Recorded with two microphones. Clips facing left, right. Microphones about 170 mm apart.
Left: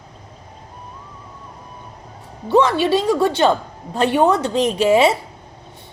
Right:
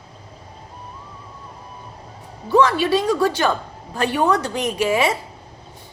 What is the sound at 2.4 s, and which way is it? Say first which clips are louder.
A woman's voice: left 1 dB; 20° left (ahead or behind).